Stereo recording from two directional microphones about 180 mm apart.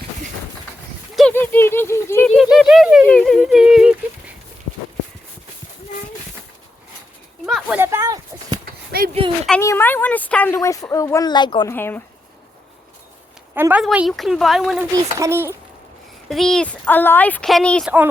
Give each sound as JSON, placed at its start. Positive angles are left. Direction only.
{"t": 1.3, "sound": "a sound", "side_deg": 10}
{"t": 2.3, "sound": "speech", "side_deg": 0}
{"t": 7.4, "sound": "a sound", "side_deg": 0}
{"t": 7.8, "sound": "a sound", "side_deg": -15}
{"t": 8.9, "sound": "speech", "side_deg": -60}
{"t": 9.6, "sound": "speech", "side_deg": 15}
{"t": 11.7, "sound": "speech", "side_deg": 10}
{"t": 13.5, "sound": "speech", "side_deg": -10}
{"t": 15.2, "sound": "speech", "side_deg": -15}
{"t": 16.3, "sound": "speech", "side_deg": 0}
{"t": 17.8, "sound": "speech", "side_deg": -10}